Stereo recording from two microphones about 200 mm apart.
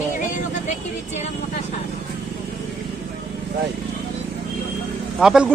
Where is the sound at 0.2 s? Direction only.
40° left (ahead or behind).